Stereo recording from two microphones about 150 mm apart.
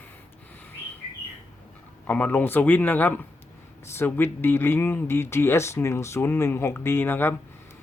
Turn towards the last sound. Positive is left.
turn(degrees=15)  # may be behind; listen again after turning